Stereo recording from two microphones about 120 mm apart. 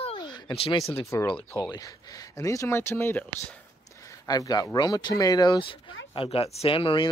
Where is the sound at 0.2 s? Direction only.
35° left (ahead or behind).